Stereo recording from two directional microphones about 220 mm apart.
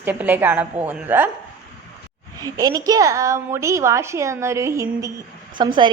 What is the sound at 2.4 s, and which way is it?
A woman's voice, 15° right (ahead or behind).